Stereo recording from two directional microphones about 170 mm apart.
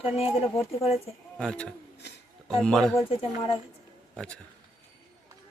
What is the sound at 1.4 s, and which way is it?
A man's voice, 5° left (ahead or behind).